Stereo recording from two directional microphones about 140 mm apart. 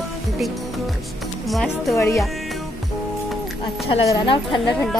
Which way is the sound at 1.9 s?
20° left (ahead or behind).